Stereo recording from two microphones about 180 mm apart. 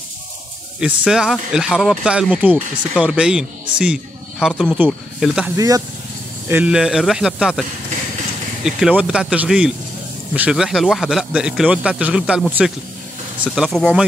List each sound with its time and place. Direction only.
0.7 s a man's voice: 5° right (ahead or behind)
6.5 s a man's voice: 5° right (ahead or behind)
8.6 s a man's voice: 5° right (ahead or behind)